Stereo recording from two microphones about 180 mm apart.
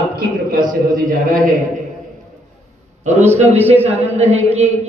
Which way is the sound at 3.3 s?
35° right (ahead or behind).